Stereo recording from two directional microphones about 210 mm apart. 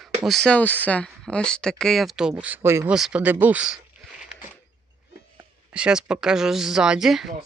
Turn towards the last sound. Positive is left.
turn(degrees=0)  # may be behind; listen again after turning